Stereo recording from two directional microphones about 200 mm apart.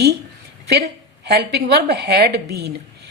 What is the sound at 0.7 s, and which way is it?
A woman's voice, 55° right (ahead or behind).